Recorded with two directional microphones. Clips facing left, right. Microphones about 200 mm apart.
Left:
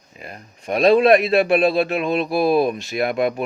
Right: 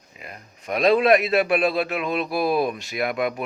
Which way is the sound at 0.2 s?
30° left (ahead or behind).